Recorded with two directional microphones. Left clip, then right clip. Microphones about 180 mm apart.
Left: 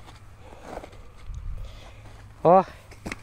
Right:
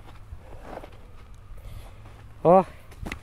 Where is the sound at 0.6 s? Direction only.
65° left (ahead or behind).